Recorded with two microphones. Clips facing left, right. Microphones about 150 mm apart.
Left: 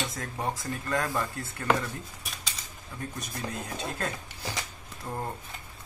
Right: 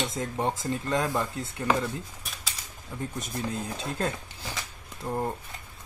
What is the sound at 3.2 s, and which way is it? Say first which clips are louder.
Speech: right 4 dB; 25° right (ahead or behind).